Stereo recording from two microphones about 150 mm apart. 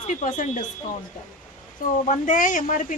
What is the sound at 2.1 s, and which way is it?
Speech, 60° left (ahead or behind).